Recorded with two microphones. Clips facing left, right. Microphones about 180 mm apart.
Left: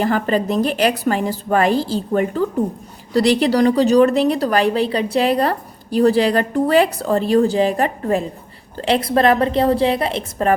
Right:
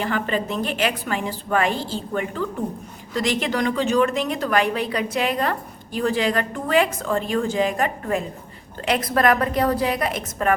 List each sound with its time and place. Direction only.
0.0 s a woman's voice: 40° left (ahead or behind)